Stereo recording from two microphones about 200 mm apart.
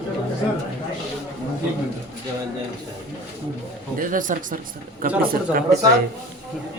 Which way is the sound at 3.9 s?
40° right (ahead or behind).